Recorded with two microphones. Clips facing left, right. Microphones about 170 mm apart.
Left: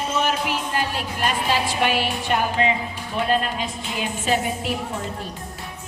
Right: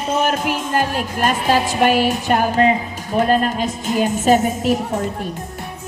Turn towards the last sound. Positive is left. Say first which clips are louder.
# right 8 dB
turn(degrees=-40)  # may be behind; listen again after turning